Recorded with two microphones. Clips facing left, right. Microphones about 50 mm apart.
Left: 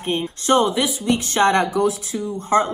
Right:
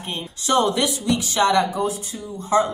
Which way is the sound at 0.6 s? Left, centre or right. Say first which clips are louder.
Left 1 dB; centre.